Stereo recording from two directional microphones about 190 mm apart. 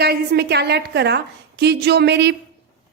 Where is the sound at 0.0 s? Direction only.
55° right (ahead or behind).